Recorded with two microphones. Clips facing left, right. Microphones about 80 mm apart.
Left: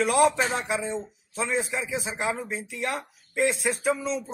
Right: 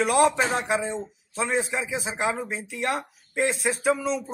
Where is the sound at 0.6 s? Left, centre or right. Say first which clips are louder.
Right 2 dB; right.